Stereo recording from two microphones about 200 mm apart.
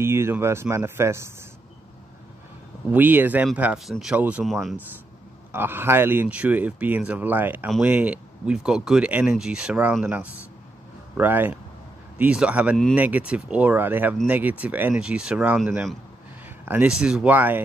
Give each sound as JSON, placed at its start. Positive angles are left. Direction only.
{"t": 0.0, "sound": "speech", "side_deg": -10}
{"t": 2.9, "sound": "speech", "side_deg": -10}
{"t": 5.5, "sound": "speech", "side_deg": -10}